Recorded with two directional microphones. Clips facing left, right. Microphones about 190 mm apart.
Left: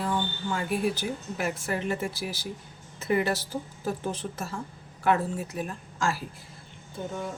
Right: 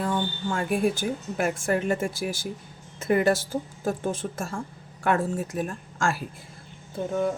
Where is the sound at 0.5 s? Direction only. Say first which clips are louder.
Right 3 dB; 50° right (ahead or behind).